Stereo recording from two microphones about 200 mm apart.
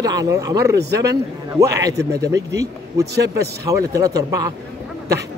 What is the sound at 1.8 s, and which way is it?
Speech, 15° right (ahead or behind).